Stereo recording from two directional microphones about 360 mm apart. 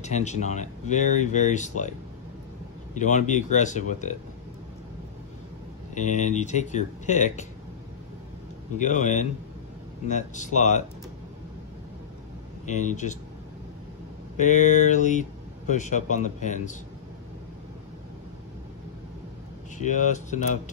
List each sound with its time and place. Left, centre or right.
0.0 s speech: centre
5.9 s speech: centre
8.7 s speech: left
12.6 s speech: centre
14.3 s speech: centre
19.8 s speech: centre